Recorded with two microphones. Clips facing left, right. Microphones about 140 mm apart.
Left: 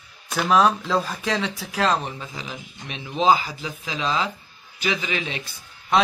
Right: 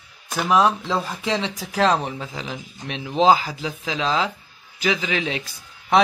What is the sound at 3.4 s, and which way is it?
A man's voice, 80° right.